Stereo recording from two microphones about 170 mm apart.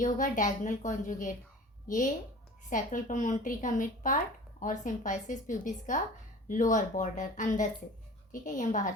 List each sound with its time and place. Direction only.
0.0 s a woman's voice: 50° left (ahead or behind)
2.6 s a woman's voice: 50° left (ahead or behind)